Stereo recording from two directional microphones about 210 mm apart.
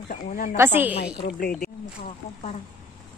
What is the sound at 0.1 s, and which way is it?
Speech, 40° left (ahead or behind).